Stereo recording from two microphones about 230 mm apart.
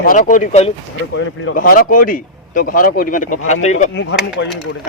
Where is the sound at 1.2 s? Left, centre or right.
Left.